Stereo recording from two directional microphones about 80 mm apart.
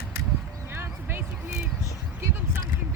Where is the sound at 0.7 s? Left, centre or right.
Right.